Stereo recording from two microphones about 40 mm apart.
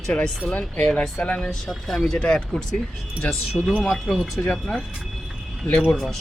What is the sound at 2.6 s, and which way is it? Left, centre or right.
Speech, left.